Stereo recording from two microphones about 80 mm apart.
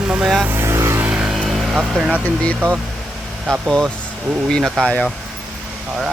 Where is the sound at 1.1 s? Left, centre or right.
Centre.